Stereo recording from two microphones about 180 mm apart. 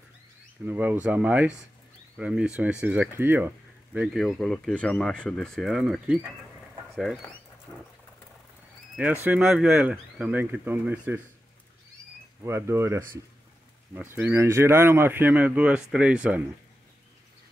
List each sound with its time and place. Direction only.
0.7 s speech: 10° right (ahead or behind)
8.9 s speech: 10° right (ahead or behind)
12.4 s speech: 15° right (ahead or behind)
14.1 s speech: 15° right (ahead or behind)